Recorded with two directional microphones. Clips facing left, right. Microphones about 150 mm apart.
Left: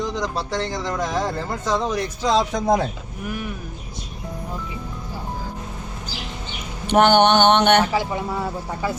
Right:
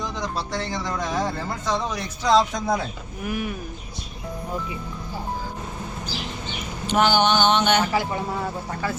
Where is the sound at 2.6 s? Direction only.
40° left (ahead or behind).